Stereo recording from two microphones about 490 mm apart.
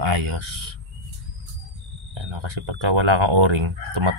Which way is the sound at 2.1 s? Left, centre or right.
Right.